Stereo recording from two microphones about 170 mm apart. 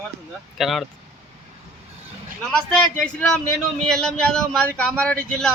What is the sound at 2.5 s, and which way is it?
A man's voice, 5° left (ahead or behind).